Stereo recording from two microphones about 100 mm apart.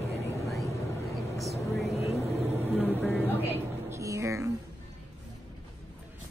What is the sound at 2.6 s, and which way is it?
Vehicle, 20° right (ahead or behind).